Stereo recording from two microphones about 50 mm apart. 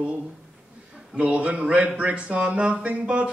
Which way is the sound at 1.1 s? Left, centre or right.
Right.